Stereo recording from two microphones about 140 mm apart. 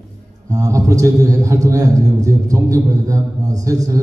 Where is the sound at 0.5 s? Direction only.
25° right (ahead or behind).